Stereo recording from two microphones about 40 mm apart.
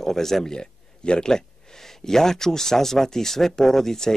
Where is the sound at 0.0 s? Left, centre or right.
Centre.